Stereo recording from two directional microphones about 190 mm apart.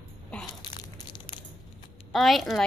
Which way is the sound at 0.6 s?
20° left (ahead or behind).